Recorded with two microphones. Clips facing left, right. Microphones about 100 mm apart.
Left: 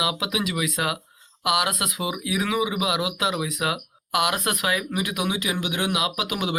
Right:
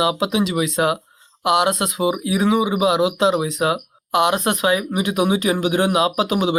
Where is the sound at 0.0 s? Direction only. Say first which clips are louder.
Right 7 dB; 30° right (ahead or behind).